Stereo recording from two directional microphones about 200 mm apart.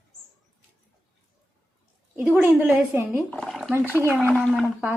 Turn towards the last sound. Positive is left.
turn(degrees=0)  # may be behind; listen again after turning